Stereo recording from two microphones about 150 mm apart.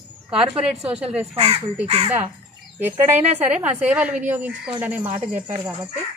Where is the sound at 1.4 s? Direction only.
45° right (ahead or behind).